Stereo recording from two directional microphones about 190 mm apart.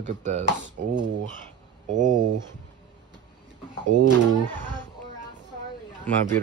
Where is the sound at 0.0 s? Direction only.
40° right (ahead or behind).